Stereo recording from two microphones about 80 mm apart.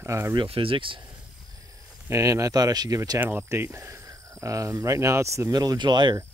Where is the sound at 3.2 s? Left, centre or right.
Right.